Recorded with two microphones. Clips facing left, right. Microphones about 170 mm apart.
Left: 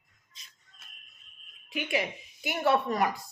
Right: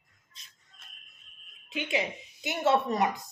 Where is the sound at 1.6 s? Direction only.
20° right (ahead or behind).